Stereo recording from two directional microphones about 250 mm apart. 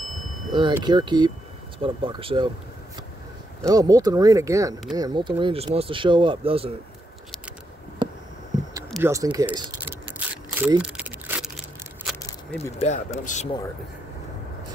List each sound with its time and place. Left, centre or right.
0.5 s speech: centre
3.6 s speech: centre
8.9 s a sound: centre
12.7 s speech: left